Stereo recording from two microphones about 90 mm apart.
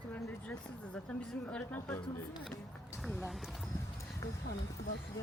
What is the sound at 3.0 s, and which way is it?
Speech, centre (ahead or behind).